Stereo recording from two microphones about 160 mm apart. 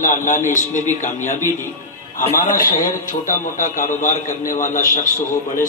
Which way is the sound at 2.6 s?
60° left (ahead or behind).